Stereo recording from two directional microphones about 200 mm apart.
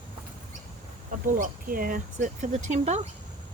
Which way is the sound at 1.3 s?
45° right (ahead or behind).